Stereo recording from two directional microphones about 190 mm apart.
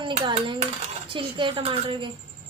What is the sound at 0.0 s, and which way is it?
Coin, 25° right (ahead or behind).